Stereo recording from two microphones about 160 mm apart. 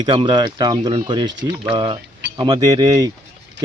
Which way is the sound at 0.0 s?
30° right (ahead or behind).